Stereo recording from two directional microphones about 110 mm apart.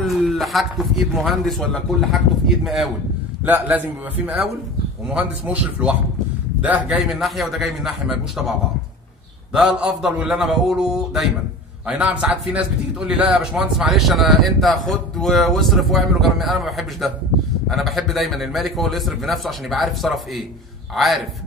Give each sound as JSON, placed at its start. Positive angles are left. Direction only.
{"t": 0.2, "sound": "a man's voice", "side_deg": 0}
{"t": 3.4, "sound": "speech", "side_deg": -15}
{"t": 5.1, "sound": "a man's voice", "side_deg": -10}